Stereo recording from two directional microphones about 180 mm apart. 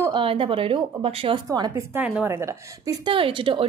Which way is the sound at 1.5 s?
20° right (ahead or behind).